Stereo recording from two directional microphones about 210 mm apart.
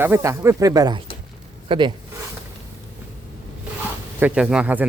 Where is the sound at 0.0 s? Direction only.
10° right (ahead or behind).